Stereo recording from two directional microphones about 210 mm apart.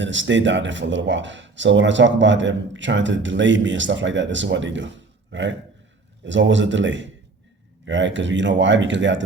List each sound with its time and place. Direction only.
0.0 s speech: 60° right (ahead or behind)